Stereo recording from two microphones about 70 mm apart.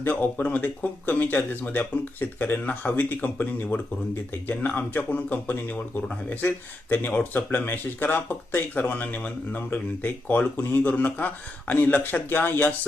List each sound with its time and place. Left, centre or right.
0.0 s speech: left
6.9 s speech: left